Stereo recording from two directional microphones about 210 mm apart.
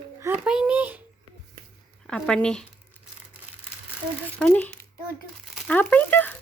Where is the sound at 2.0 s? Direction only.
5° left (ahead or behind).